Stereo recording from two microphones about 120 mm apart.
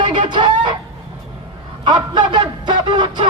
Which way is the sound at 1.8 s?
40° right (ahead or behind).